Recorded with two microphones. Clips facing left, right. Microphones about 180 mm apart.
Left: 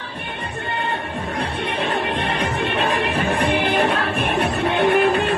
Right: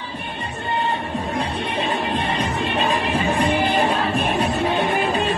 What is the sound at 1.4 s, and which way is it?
Music, 60° left (ahead or behind).